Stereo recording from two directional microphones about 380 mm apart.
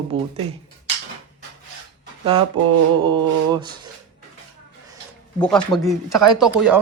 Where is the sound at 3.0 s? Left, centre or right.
Centre.